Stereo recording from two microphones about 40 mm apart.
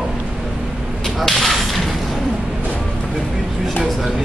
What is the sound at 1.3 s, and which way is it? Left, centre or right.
Mechanisms, centre.